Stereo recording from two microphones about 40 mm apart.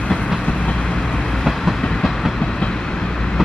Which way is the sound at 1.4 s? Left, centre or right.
Centre.